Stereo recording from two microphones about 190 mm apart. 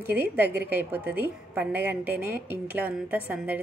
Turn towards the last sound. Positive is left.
turn(degrees=-10)  # may be behind; listen again after turning